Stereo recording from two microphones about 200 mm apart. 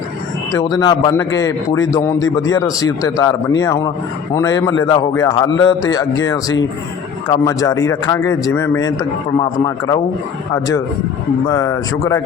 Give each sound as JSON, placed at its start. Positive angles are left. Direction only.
{"t": 0.5, "sound": "a man's voice", "side_deg": 20}
{"t": 11.4, "sound": "a man's voice", "side_deg": 15}